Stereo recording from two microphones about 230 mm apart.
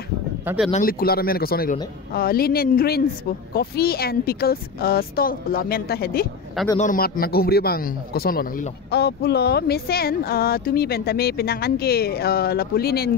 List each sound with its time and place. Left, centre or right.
0.7 s a man's voice: left